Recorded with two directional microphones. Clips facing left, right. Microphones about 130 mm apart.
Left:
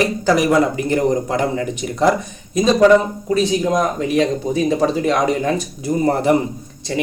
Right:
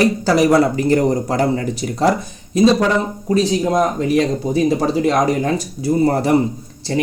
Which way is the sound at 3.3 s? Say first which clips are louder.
Right 1 dB; 35° right (ahead or behind).